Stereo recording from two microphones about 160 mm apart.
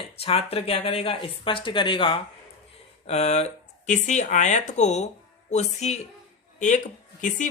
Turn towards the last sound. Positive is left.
turn(degrees=50)  # may be behind; listen again after turning